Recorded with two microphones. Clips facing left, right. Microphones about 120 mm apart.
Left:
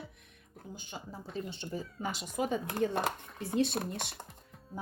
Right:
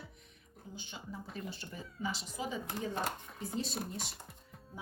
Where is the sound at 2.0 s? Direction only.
55° left (ahead or behind).